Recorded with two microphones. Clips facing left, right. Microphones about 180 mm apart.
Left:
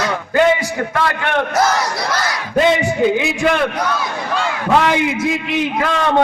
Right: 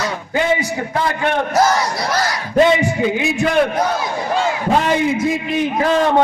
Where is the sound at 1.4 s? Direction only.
65° left (ahead or behind).